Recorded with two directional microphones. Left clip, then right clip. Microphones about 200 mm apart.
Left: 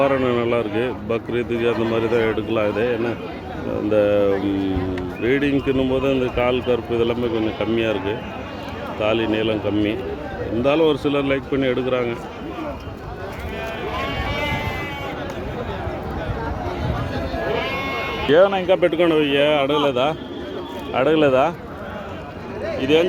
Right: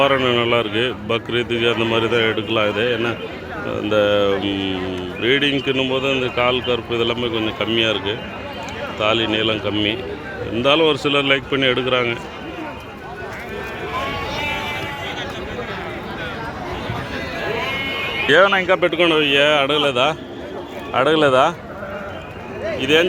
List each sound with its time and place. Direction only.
0.0 s speech: 5° left (ahead or behind)
4.4 s speech: 50° left (ahead or behind)
5.2 s speech: 10° left (ahead or behind)
18.3 s speech: 10° left (ahead or behind)
22.8 s speech: centre (ahead or behind)